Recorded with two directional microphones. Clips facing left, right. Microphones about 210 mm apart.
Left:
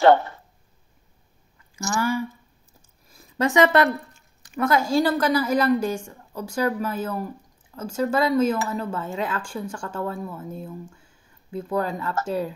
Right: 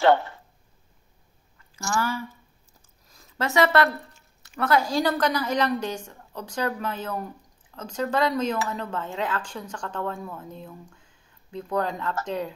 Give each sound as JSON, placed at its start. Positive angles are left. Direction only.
{"t": 0.0, "sound": "speech", "side_deg": 45}
{"t": 1.9, "sound": "speech", "side_deg": 10}
{"t": 3.1, "sound": "a sound", "side_deg": 15}
{"t": 4.6, "sound": "speech", "side_deg": 10}